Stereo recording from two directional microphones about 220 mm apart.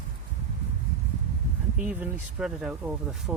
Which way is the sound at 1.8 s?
5° right (ahead or behind).